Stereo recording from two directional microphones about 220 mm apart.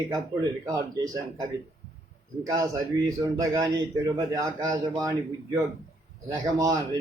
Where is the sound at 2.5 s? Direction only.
15° right (ahead or behind).